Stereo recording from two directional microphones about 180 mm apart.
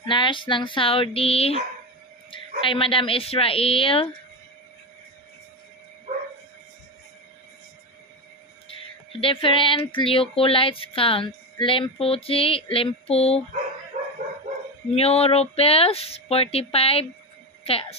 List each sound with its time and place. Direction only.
0.0 s speech: 25° left (ahead or behind)
9.2 s speech: 30° left (ahead or behind)
13.9 s dog: 40° right (ahead or behind)
14.9 s speech: 35° left (ahead or behind)